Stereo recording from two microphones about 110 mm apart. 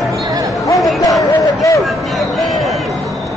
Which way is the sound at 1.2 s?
30° left (ahead or behind).